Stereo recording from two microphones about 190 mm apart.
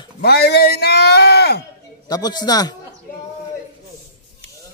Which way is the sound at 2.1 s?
20° left (ahead or behind).